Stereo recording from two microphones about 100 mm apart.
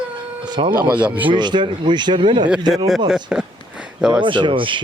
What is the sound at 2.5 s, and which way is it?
Speech, 5° right (ahead or behind).